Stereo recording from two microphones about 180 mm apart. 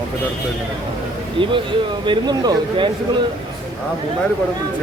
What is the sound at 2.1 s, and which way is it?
Speech, 25° right (ahead or behind).